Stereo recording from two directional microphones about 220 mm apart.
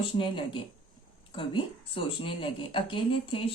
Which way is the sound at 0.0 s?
20° left (ahead or behind).